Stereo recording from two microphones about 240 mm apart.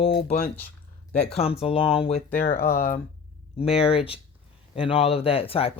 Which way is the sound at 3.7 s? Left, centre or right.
Left.